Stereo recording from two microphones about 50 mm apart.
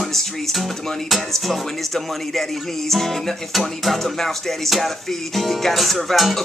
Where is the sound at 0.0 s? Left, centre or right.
Centre.